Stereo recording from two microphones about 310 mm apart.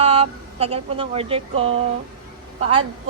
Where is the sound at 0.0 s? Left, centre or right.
Centre.